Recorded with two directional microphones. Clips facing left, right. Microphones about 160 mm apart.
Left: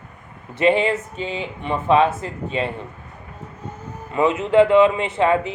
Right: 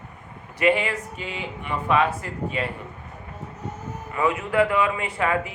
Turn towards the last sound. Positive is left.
turn(degrees=25)  # may be behind; listen again after turning